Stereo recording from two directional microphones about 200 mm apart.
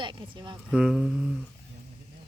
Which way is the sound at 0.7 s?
5° right (ahead or behind).